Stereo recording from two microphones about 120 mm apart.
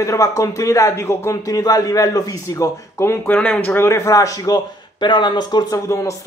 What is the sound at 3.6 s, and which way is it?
A man's voice, 20° left (ahead or behind).